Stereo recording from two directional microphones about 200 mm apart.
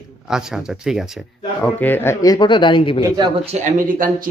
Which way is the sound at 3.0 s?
25° right (ahead or behind).